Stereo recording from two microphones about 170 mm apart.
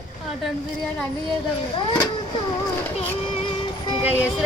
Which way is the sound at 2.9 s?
35° left (ahead or behind).